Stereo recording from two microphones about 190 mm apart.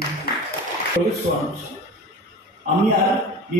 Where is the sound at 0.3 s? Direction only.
55° left (ahead or behind).